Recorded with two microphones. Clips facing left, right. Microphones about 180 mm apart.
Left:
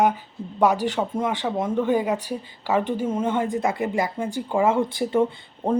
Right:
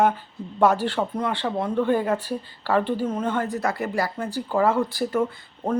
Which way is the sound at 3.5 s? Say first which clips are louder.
Left 2 dB; 25° left (ahead or behind).